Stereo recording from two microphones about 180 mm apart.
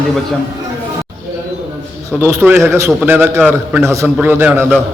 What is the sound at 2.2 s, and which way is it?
A man's voice, 10° right (ahead or behind).